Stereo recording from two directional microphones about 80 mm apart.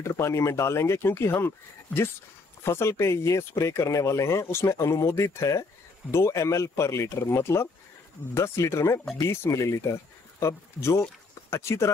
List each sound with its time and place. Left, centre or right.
0.0 s speech: left
2.6 s speech: left